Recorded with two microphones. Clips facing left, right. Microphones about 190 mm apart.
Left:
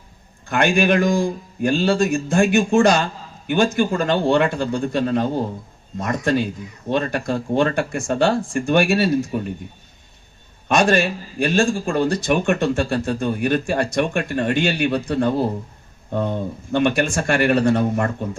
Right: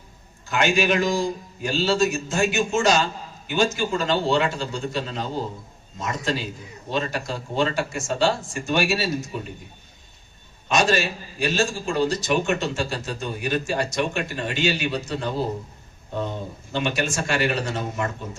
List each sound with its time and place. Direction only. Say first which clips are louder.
0.4 s a man's voice: left 4 dB; 55° left (ahead or behind)
10.7 s a man's voice: left 4 dB; 55° left (ahead or behind)